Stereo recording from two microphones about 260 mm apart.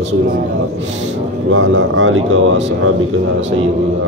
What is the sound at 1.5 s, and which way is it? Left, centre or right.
Speech, right.